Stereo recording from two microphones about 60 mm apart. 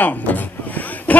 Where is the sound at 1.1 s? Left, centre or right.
Left.